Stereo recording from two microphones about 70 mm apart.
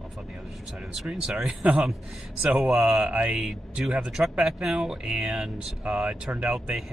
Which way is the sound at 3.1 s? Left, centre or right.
Centre.